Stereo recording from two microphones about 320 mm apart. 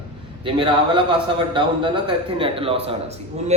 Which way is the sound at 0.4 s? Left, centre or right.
Centre.